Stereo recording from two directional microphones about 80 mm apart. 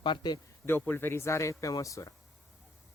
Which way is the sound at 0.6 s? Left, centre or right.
Left.